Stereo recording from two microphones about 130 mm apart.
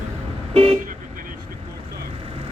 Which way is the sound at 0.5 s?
45° right (ahead or behind).